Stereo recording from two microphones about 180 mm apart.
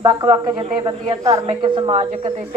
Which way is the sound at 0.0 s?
25° right (ahead or behind).